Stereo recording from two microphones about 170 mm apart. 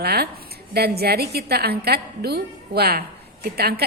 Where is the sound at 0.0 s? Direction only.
65° right (ahead or behind).